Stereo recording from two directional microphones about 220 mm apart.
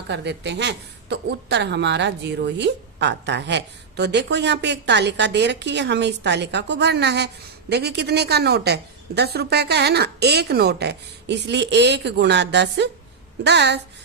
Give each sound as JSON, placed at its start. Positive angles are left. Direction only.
{"t": 0.1, "sound": "a woman's voice", "side_deg": -50}